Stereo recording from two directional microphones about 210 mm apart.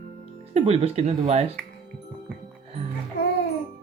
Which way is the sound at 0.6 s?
30° right (ahead or behind).